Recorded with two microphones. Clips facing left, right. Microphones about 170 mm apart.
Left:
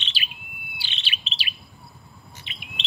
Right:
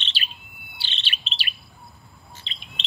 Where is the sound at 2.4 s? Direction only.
15° left (ahead or behind).